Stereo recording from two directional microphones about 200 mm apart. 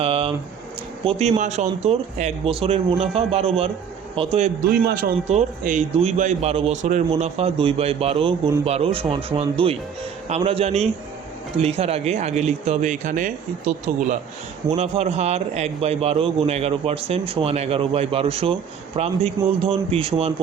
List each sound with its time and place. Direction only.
0.0 s a sound: 30° right (ahead or behind)
1.0 s a man's voice: 30° right (ahead or behind)
4.9 s a man's voice: 45° right (ahead or behind); by 20.3 s 30° right (ahead or behind)